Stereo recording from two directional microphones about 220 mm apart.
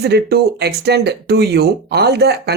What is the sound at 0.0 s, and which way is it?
Speech, 50° right (ahead or behind).